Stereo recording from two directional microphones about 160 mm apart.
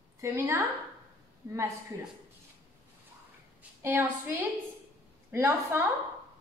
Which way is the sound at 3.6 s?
15° right (ahead or behind).